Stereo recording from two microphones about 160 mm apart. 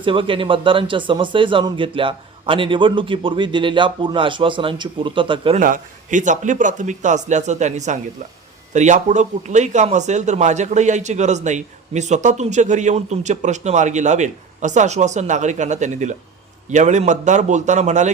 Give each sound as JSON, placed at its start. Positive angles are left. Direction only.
{"t": 0.0, "sound": "speech", "side_deg": -35}
{"t": 5.5, "sound": "speech", "side_deg": -55}